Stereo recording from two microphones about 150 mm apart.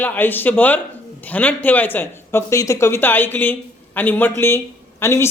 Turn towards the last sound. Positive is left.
turn(degrees=20)  # may be behind; listen again after turning